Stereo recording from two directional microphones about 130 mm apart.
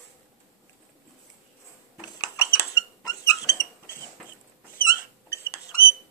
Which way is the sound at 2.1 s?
25° left (ahead or behind).